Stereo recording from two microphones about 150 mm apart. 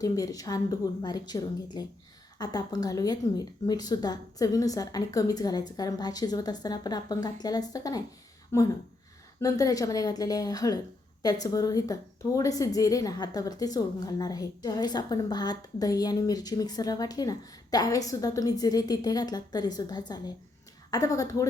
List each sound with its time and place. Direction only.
0.0 s a woman's voice: 25° left (ahead or behind)